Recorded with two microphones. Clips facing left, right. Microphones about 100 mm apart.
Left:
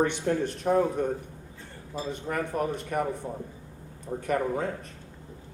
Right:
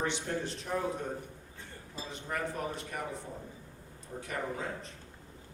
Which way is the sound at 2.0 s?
50° left (ahead or behind).